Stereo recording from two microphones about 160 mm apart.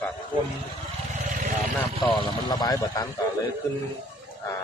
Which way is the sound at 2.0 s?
30° left (ahead or behind).